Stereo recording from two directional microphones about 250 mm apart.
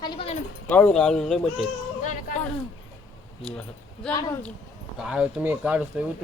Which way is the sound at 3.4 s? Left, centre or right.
Centre.